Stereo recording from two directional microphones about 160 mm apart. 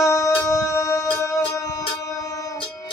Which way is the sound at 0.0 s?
20° left (ahead or behind).